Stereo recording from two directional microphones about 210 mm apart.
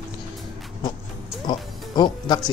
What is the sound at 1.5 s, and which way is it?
Music, 20° left (ahead or behind).